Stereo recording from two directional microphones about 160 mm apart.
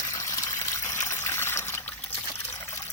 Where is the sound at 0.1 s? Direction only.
20° left (ahead or behind).